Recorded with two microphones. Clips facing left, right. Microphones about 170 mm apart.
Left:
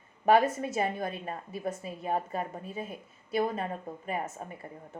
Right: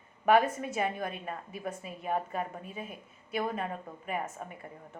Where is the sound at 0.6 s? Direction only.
35° left (ahead or behind).